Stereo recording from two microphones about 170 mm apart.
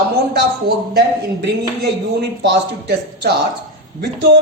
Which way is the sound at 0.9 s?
80° right.